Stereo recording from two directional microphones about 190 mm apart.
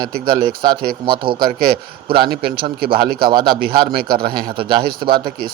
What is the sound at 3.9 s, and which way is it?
Speech, 50° right (ahead or behind).